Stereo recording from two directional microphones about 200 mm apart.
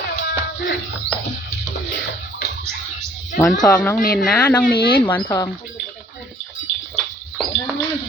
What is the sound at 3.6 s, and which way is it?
Speech, 5° left (ahead or behind).